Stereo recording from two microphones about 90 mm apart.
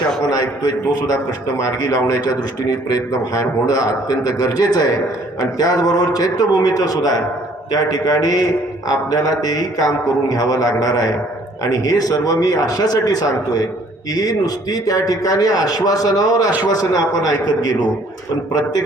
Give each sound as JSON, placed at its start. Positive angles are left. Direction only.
{"t": 1.6, "sound": "a man's voice", "side_deg": 40}